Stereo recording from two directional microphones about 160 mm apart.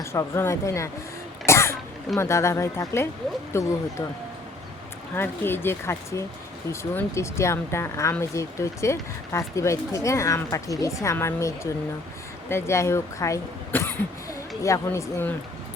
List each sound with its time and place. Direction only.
0.0 s speech: 15° left (ahead or behind)
1.5 s throat clearing: 15° left (ahead or behind)
2.1 s speech: 15° left (ahead or behind)
5.1 s speech: 15° left (ahead or behind)